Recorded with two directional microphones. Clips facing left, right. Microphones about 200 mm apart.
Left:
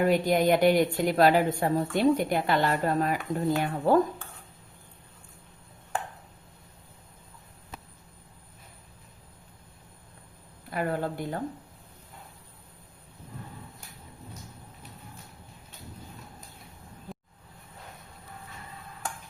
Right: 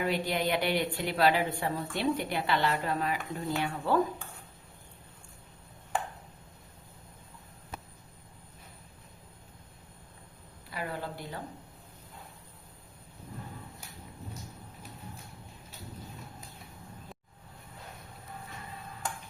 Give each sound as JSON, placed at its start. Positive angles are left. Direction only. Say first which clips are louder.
{"t": 0.0, "sound": "speech", "louder": "left 7 dB", "side_deg": 45}
{"t": 10.7, "sound": "speech", "louder": "left 8 dB", "side_deg": 50}